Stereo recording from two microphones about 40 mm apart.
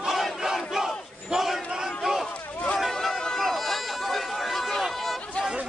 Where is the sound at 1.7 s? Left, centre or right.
Centre.